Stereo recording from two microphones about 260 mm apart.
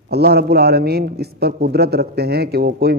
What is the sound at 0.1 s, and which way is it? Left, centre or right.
A man's voice, right.